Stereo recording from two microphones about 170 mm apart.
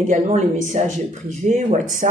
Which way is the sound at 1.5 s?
45° right (ahead or behind).